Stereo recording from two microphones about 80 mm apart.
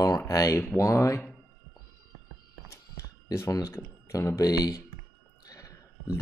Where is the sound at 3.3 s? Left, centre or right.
Left.